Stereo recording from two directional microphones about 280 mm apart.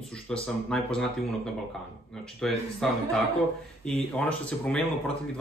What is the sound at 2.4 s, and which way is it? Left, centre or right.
Speech, centre.